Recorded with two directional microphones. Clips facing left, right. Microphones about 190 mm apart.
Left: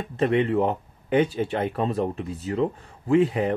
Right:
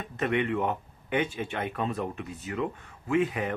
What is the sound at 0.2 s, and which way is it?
Speech, 30° left (ahead or behind).